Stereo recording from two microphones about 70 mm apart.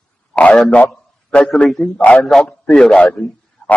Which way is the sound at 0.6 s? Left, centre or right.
Centre.